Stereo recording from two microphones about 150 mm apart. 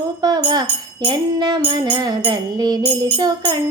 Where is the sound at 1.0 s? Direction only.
30° right (ahead or behind).